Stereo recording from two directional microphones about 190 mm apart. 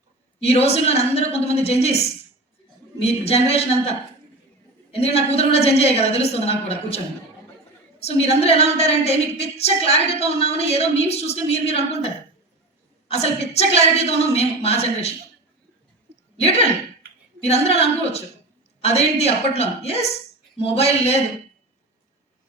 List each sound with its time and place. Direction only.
0.3 s a woman's voice: 30° left (ahead or behind)
17.4 s a woman's voice: 35° left (ahead or behind)